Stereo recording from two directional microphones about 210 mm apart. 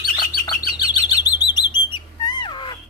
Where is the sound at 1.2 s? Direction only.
20° left (ahead or behind).